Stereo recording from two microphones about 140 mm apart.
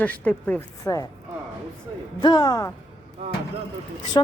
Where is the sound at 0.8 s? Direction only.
25° left (ahead or behind).